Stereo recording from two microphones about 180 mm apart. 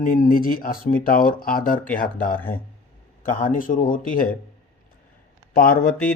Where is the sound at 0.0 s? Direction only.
50° left (ahead or behind).